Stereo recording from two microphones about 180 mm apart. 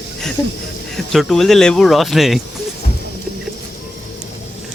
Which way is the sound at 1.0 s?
5° left (ahead or behind).